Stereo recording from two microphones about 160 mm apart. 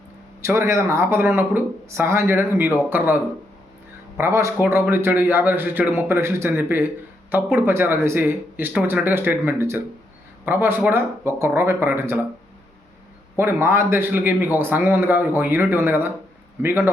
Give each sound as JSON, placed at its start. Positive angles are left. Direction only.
{"t": 0.4, "sound": "a man's voice", "side_deg": -15}
{"t": 4.2, "sound": "a man's voice", "side_deg": -20}
{"t": 13.3, "sound": "a man's voice", "side_deg": -15}